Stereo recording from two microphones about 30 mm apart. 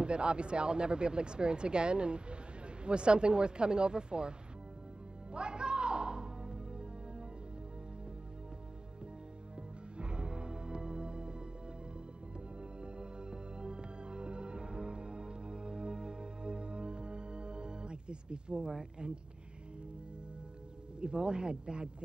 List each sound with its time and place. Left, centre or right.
0.0 s speech: right
5.3 s music: right
9.6 s music: right
12.5 s music: right
21.0 s speech: right